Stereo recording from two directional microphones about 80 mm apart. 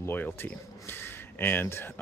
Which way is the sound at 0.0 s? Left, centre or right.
Left.